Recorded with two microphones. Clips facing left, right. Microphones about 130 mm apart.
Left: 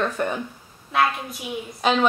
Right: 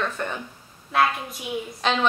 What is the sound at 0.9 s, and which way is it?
Speech, 5° left (ahead or behind).